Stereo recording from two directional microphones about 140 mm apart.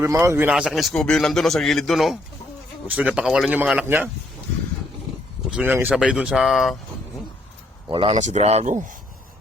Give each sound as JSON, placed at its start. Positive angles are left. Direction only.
{"t": 0.0, "sound": "speech", "side_deg": -20}
{"t": 0.5, "sound": "a man's voice", "side_deg": -5}
{"t": 2.8, "sound": "a man's voice", "side_deg": -10}
{"t": 5.5, "sound": "a man's voice", "side_deg": -10}
{"t": 7.9, "sound": "speech", "side_deg": -40}
{"t": 8.1, "sound": "speech", "side_deg": -55}